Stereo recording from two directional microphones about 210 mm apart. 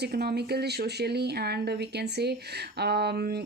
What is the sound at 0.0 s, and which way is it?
Speech, 50° right (ahead or behind).